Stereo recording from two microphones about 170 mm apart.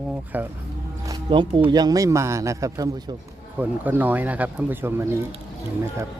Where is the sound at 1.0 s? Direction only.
30° right (ahead or behind); by 5.0 s 15° right (ahead or behind).